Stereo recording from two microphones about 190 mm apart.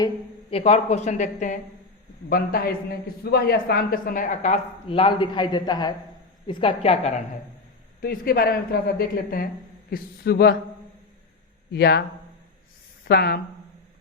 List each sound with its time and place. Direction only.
0.5 s a woman's voice: 35° left (ahead or behind)
2.3 s a woman's voice: 50° left (ahead or behind); by 7.1 s 35° left (ahead or behind)
8.0 s a woman's voice: 50° left (ahead or behind)
11.7 s a man's voice: 60° left (ahead or behind)
13.1 s a man's voice: 55° left (ahead or behind)